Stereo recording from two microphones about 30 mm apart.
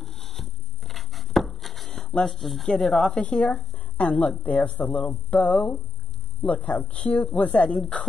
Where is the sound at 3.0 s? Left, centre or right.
Left.